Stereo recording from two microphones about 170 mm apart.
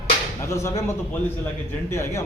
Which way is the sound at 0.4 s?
15° left (ahead or behind).